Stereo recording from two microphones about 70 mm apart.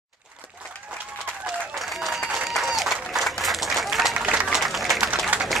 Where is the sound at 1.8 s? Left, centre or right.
Centre.